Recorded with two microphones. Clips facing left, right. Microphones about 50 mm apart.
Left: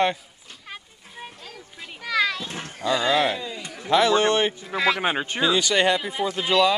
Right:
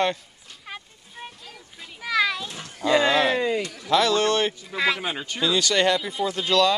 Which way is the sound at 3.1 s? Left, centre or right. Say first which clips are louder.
Right 1 dB; centre.